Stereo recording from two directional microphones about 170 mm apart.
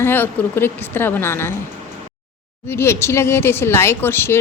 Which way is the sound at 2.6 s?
15° left (ahead or behind).